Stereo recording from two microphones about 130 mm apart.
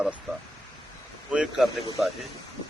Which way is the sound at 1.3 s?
5° right (ahead or behind).